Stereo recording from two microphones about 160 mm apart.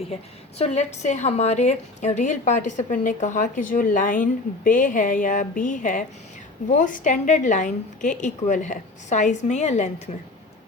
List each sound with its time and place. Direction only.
0.6 s a woman's voice: 45° left (ahead or behind)